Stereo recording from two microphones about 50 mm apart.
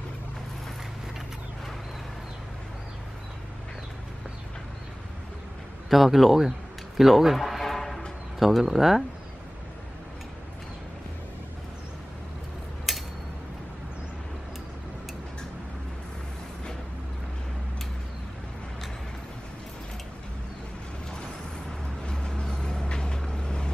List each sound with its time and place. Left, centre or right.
5.9 s a man's voice: centre
7.0 s music: centre
8.4 s a man's voice: centre
12.9 s a sound: centre
22.0 s vehicle: centre